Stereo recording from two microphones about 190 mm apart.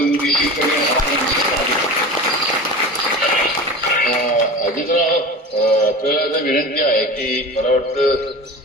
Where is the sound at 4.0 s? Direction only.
45° left (ahead or behind).